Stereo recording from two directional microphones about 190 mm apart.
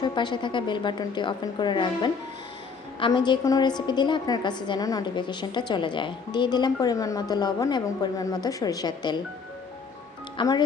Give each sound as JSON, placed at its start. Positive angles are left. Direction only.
{"t": 0.0, "sound": "a woman's voice", "side_deg": 25}
{"t": 10.3, "sound": "speech", "side_deg": 20}